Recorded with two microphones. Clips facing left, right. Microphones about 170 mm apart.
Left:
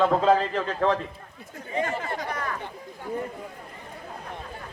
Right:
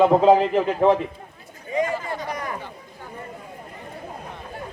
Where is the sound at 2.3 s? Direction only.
15° right (ahead or behind).